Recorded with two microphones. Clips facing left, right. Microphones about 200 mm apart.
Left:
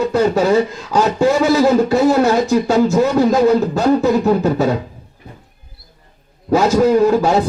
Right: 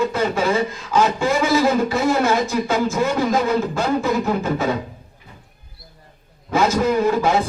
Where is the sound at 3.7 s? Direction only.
40° left (ahead or behind).